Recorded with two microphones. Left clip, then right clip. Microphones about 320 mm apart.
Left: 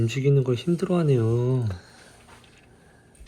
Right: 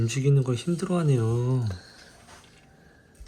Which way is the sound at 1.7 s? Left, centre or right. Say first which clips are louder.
Left 1 dB; centre.